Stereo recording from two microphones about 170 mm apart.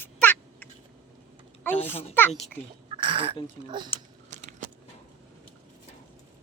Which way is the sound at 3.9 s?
35° left (ahead or behind).